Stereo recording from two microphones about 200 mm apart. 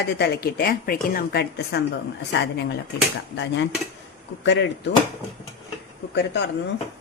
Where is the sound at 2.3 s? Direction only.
60° left (ahead or behind).